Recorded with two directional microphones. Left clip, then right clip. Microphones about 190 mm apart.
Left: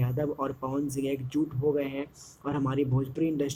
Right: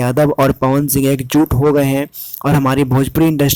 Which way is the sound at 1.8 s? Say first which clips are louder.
Right 17 dB; 55° right (ahead or behind).